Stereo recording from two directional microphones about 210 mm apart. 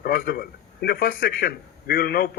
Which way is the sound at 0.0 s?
45° left (ahead or behind).